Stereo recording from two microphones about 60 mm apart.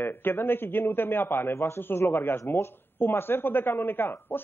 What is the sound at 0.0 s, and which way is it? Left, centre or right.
A man's voice, left.